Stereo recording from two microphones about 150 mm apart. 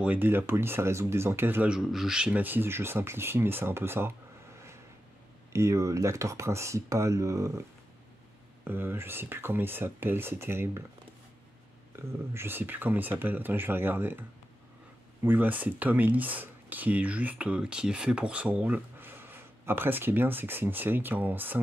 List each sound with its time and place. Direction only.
0.0 s speech: 10° right (ahead or behind)
5.5 s speech: 20° right (ahead or behind)
8.6 s speech: 15° right (ahead or behind)
12.4 s speech: 15° right (ahead or behind)
15.2 s speech: 10° right (ahead or behind)